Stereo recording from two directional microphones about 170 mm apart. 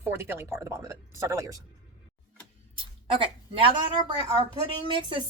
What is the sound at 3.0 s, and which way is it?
A woman's voice, 30° right (ahead or behind).